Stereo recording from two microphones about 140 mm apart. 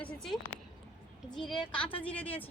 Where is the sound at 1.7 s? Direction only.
40° left (ahead or behind).